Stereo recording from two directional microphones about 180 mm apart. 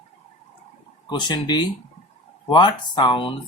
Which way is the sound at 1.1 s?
25° left (ahead or behind).